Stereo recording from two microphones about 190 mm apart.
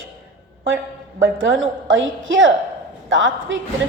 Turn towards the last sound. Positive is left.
turn(degrees=-85)